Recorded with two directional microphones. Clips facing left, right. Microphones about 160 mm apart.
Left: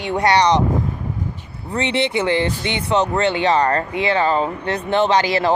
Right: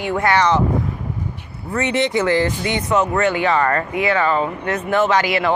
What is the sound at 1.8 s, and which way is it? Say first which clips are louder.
Speech: right 1 dB; 20° left (ahead or behind).